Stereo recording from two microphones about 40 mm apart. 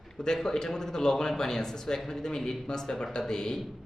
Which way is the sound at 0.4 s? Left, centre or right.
Centre.